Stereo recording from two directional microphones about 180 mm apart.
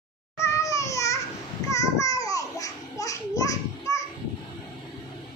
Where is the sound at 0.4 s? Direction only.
15° left (ahead or behind).